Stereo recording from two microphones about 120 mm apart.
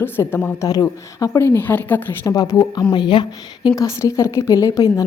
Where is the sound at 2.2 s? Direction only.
25° left (ahead or behind).